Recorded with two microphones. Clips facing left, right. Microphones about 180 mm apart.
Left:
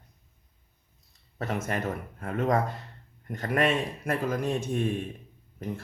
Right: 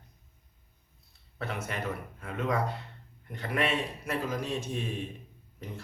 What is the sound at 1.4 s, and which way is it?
Speech, 45° left (ahead or behind).